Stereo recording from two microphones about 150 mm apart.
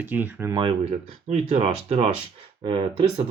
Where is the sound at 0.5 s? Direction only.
35° right (ahead or behind).